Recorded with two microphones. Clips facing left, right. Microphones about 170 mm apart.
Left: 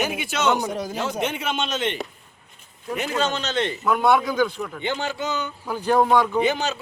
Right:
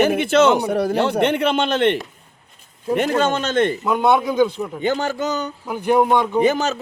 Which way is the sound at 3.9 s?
20° right (ahead or behind).